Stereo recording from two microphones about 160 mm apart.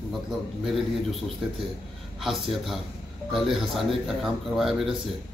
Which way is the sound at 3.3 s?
Centre (ahead or behind).